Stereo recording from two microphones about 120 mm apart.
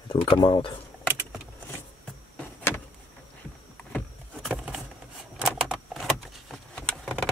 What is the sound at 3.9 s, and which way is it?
Vehicle, 5° left (ahead or behind).